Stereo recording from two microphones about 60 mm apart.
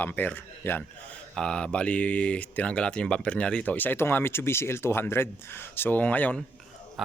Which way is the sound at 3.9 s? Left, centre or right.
Left.